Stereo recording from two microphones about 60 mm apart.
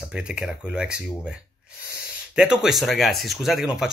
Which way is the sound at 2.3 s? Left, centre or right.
Centre.